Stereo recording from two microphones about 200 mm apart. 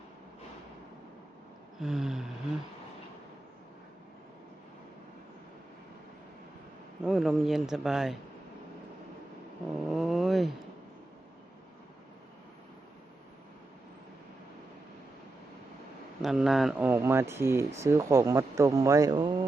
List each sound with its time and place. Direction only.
1.8 s speech: centre (ahead or behind)
7.0 s speech: centre (ahead or behind)
9.9 s vehicle: centre (ahead or behind)
16.2 s speech: centre (ahead or behind); by 19.3 s 20° right (ahead or behind)